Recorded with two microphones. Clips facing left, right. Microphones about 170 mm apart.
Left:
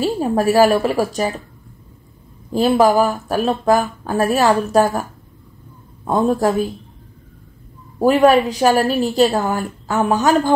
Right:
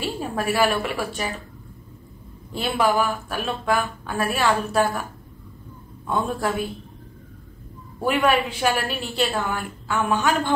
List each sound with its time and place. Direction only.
0.0 s speech: 40° left (ahead or behind)
2.5 s speech: 40° left (ahead or behind)
6.0 s speech: 40° left (ahead or behind)
8.0 s speech: 40° left (ahead or behind)